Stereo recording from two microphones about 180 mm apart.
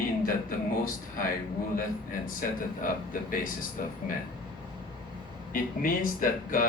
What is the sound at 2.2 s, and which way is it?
Speech, 50° left (ahead or behind).